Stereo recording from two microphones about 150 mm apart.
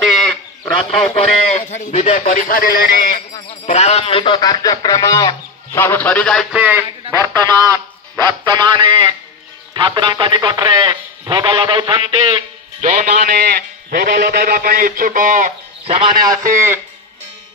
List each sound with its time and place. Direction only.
0.8 s speech: 40° left (ahead or behind); by 3.2 s 70° left (ahead or behind)
3.6 s a man's voice: 50° left (ahead or behind); by 6.4 s 10° left (ahead or behind)
6.5 s a man's voice: 10° right (ahead or behind)
7.2 s a man's voice: 25° right (ahead or behind)
12.8 s a man's voice: 60° right (ahead or behind)
16.4 s speech: 15° right (ahead or behind)